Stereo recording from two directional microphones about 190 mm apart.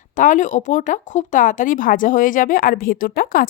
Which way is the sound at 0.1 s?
40° left (ahead or behind).